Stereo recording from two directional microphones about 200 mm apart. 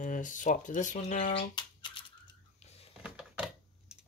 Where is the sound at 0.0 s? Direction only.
40° left (ahead or behind).